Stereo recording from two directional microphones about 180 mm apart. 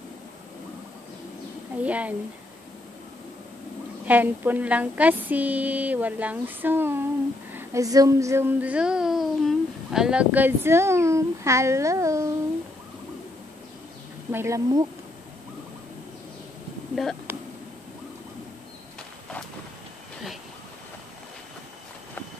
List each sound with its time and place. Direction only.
1.8 s child singing: 10° right (ahead or behind)
4.0 s child singing: 10° right (ahead or behind)
14.3 s child singing: 15° right (ahead or behind)
16.9 s a sound: centre (ahead or behind)